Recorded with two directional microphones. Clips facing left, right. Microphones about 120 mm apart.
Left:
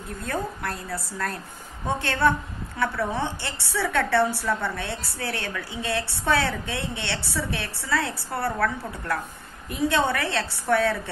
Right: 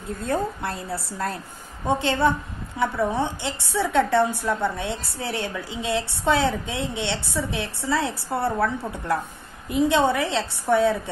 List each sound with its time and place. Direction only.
0.2 s a woman's voice: 25° right (ahead or behind)